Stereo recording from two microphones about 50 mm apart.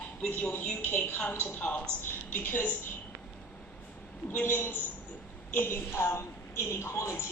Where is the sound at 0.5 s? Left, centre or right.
Left.